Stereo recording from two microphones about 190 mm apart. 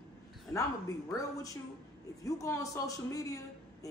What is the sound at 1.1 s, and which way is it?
A man's voice, 15° left (ahead or behind).